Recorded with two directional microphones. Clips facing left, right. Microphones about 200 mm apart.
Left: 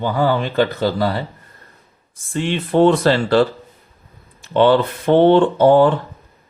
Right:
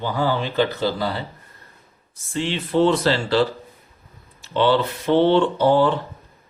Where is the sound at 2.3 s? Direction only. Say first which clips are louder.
Left 4 dB; 55° left (ahead or behind).